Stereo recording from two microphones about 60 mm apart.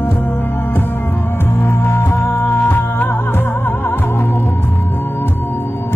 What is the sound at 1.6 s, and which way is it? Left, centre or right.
Music, left.